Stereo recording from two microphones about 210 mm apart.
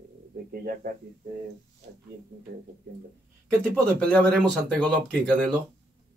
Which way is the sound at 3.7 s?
5° left (ahead or behind).